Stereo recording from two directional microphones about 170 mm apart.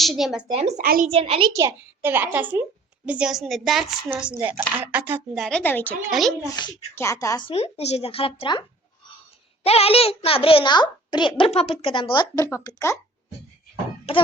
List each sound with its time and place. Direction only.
0.0 s a woman's voice: centre (ahead or behind)
0.8 s a woman's voice: 55° right (ahead or behind)
1.1 s a child's voice: 35° right (ahead or behind)
1.5 s a child's voice: 15° right (ahead or behind)
5.3 s speech: 5° left (ahead or behind)
6.1 s a woman's voice: centre (ahead or behind)
6.4 s a child's voice: 25° left (ahead or behind)
7.4 s a child's voice: 40° left (ahead or behind)
9.6 s a child's voice: 35° left (ahead or behind); by 13.0 s 15° left (ahead or behind)
14.1 s a child's voice: 35° left (ahead or behind)